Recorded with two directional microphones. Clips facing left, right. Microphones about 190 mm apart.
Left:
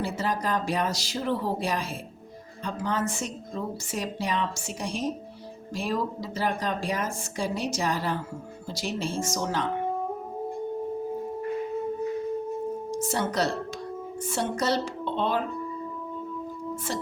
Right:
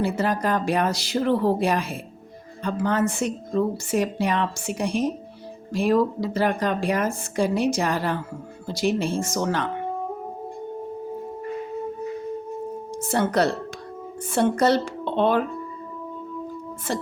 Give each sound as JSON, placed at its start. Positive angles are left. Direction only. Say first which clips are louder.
{"t": 0.0, "sound": "speech", "louder": "right 5 dB", "side_deg": -60}
{"t": 12.9, "sound": "music", "louder": "right 8 dB", "side_deg": -60}
{"t": 14.3, "sound": "speech", "louder": "right 7 dB", "side_deg": -55}
{"t": 16.9, "sound": "speech", "louder": "right 5 dB", "side_deg": -60}